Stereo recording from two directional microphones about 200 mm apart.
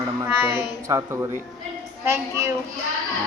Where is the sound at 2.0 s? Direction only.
15° right (ahead or behind).